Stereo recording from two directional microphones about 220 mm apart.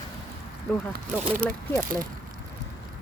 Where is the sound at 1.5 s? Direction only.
5° left (ahead or behind).